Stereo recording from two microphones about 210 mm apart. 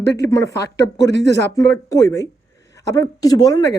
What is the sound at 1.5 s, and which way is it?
Speech, 15° left (ahead or behind).